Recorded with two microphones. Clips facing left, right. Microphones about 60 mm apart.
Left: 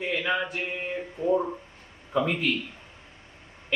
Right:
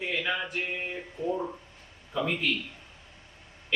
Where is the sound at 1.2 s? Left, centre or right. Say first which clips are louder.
Left 5 dB; left.